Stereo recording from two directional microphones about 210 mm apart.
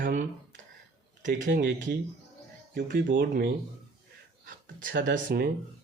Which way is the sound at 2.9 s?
60° right (ahead or behind).